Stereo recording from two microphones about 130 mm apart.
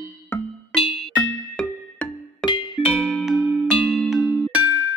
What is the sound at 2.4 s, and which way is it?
Music, 35° left (ahead or behind).